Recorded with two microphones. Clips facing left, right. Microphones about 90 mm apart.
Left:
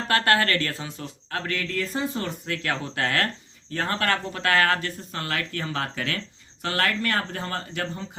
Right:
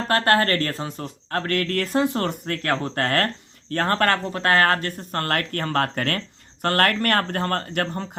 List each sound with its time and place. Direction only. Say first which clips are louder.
0.1 s speech: right 2 dB; 35° right (ahead or behind); by 8.0 s 60° right (ahead or behind)